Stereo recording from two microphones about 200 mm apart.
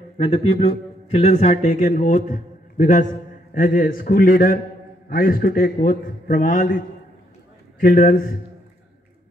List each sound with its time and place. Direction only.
0.2 s a man's voice: 25° left (ahead or behind); by 6.7 s 40° left (ahead or behind)
7.8 s a man's voice: 45° left (ahead or behind)